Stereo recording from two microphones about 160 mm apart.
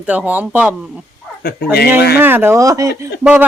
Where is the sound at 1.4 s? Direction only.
80° left.